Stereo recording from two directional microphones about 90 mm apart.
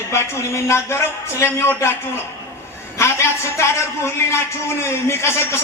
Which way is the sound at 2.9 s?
30° left (ahead or behind).